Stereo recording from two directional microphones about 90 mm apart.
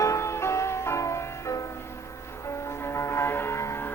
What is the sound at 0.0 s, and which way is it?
Music, 35° left (ahead or behind).